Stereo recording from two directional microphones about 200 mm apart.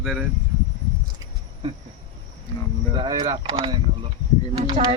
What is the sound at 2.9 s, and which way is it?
Speech, 20° right (ahead or behind).